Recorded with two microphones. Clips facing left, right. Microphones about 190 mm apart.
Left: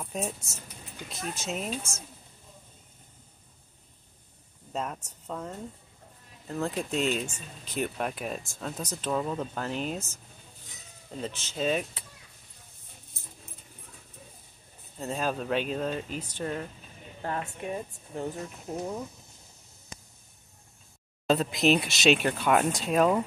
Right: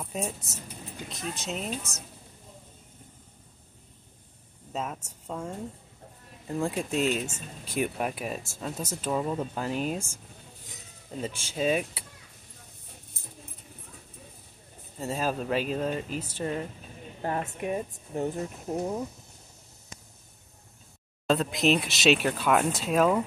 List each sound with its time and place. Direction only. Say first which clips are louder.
0.0 s speech: even; centre (ahead or behind)
4.7 s speech: even; 5° right (ahead or behind)
15.0 s speech: right 1 dB; 5° right (ahead or behind)
17.2 s speech: right 3 dB; 20° right (ahead or behind)
21.3 s speech: even; centre (ahead or behind)